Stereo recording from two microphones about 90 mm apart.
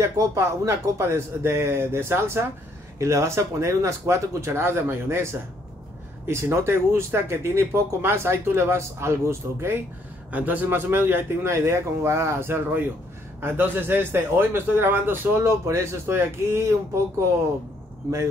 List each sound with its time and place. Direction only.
0.0 s a man's voice: 30° right (ahead or behind)
10.3 s a man's voice: 20° right (ahead or behind)